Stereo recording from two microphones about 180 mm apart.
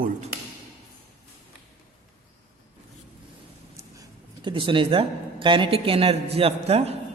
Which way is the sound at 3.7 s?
20° right (ahead or behind).